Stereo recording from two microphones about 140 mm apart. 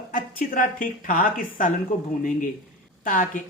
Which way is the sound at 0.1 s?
85° left.